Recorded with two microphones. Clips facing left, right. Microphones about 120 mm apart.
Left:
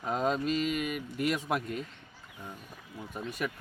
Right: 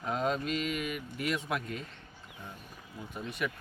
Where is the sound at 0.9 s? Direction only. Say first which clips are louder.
Left 3 dB; 45° left (ahead or behind).